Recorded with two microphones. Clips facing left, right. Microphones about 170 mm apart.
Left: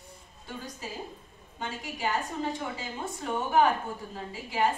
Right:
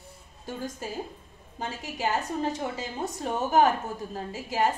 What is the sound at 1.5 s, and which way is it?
A woman's voice, 40° right (ahead or behind).